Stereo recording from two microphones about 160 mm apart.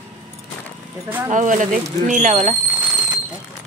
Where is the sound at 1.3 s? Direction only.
50° right (ahead or behind).